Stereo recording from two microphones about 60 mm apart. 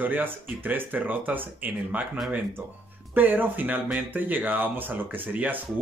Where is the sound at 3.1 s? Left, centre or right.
Right.